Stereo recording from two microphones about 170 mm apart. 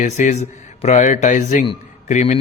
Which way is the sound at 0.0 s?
45° left (ahead or behind).